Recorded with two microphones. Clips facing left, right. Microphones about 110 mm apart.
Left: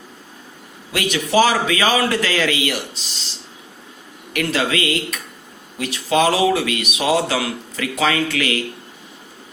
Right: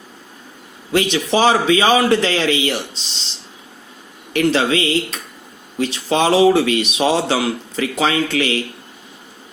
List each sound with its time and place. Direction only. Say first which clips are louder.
0.9 s speech: right 1 dB; 25° right (ahead or behind)
4.3 s speech: right 5 dB; 30° right (ahead or behind)